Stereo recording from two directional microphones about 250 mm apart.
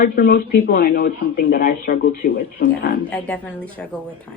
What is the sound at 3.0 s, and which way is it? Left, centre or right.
Speech, centre.